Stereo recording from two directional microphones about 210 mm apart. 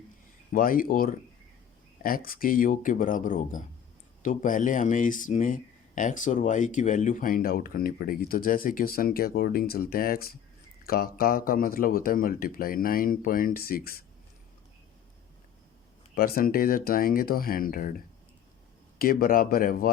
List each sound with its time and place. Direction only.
0.5 s speech: 40° left (ahead or behind)
16.1 s speech: 45° left (ahead or behind)
18.9 s speech: 45° left (ahead or behind)